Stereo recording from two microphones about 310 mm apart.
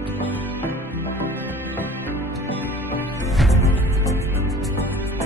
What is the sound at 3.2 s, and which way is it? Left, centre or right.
Music, centre.